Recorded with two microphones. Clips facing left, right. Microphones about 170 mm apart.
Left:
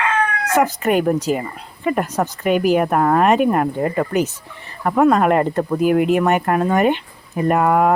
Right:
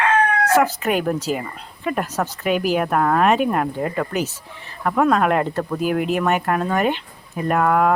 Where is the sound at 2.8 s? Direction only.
5° left (ahead or behind).